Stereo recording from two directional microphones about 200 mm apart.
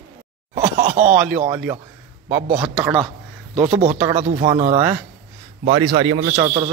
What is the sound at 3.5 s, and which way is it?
Speech, 30° right (ahead or behind).